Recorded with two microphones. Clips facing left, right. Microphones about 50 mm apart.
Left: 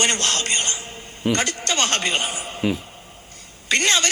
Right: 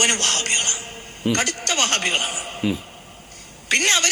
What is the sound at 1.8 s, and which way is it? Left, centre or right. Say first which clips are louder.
Speech: even; right.